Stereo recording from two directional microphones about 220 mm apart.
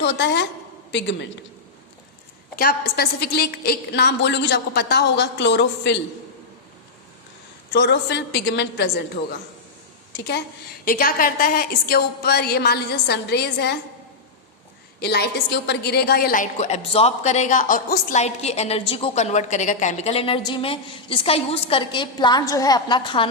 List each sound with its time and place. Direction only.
0.0 s a woman's voice: 50° left (ahead or behind)
2.6 s a woman's voice: 45° left (ahead or behind)
7.7 s a woman's voice: 50° left (ahead or behind)
10.8 s a woman's voice: 40° left (ahead or behind)
15.0 s a woman's voice: 50° left (ahead or behind); by 23.3 s 20° left (ahead or behind)